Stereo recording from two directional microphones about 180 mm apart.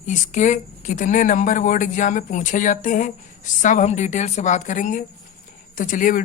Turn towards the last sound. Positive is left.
turn(degrees=50)  # may be behind; listen again after turning